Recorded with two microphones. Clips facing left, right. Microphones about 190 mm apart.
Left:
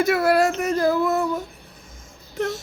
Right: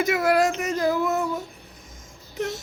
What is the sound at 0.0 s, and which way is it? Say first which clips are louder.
Child singing: left 2 dB; 15° right (ahead or behind).